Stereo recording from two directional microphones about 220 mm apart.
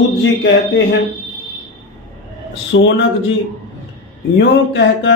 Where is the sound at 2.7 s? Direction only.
55° left (ahead or behind).